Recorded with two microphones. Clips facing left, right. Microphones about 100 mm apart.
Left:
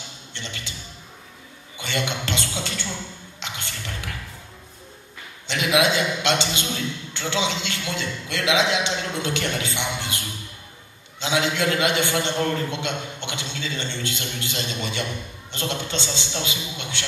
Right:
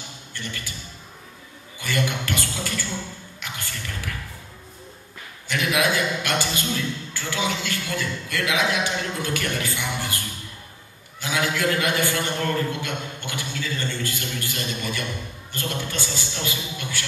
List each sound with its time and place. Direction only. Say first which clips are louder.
0.3 s a man's voice: right 1 dB; 20° left (ahead or behind)
1.8 s a man's voice: right 1 dB; 20° left (ahead or behind)
3.3 s a sound: left 1 dB; 20° left (ahead or behind)
5.5 s a man's voice: left 2 dB; 20° left (ahead or behind)